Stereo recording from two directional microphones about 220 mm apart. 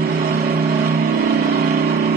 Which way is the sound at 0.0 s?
45° right (ahead or behind).